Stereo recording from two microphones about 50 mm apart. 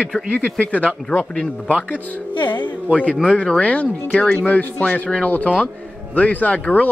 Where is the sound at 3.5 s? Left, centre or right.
Left.